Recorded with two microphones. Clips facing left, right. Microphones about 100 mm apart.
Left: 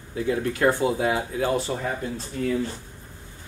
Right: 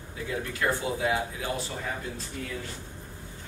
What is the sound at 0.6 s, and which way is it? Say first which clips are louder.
Speech: left 6 dB; 45° left (ahead or behind).